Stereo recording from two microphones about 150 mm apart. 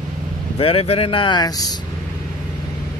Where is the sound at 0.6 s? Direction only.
40° left (ahead or behind).